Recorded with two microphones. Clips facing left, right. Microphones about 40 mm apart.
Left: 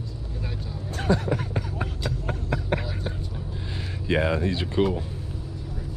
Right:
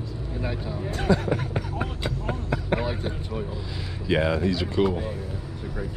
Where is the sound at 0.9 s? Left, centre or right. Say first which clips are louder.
Right 1 dB; right.